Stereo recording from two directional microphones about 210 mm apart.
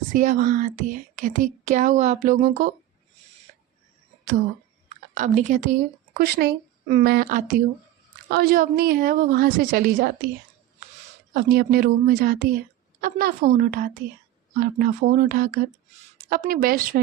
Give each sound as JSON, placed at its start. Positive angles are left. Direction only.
{"t": 0.1, "sound": "a woman's voice", "side_deg": -40}
{"t": 4.9, "sound": "speech", "side_deg": -35}
{"t": 6.1, "sound": "a woman's voice", "side_deg": -50}
{"t": 11.3, "sound": "a woman's voice", "side_deg": -45}